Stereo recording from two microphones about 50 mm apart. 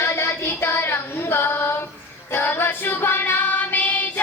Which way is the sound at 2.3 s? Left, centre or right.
Left.